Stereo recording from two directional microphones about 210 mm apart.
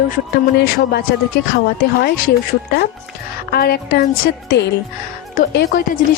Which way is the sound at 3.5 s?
50° left (ahead or behind).